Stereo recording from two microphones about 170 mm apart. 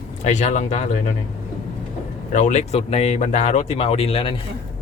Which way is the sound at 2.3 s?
45° left (ahead or behind).